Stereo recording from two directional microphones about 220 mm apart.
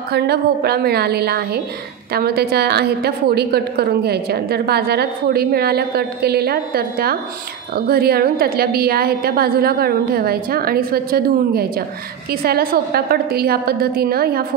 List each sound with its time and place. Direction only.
0.1 s a woman's voice: 45° right (ahead or behind)